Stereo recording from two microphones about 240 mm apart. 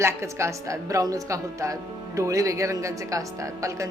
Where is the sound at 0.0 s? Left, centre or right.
Centre.